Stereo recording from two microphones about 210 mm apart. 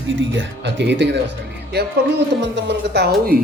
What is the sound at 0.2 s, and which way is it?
Speech, 60° right (ahead or behind).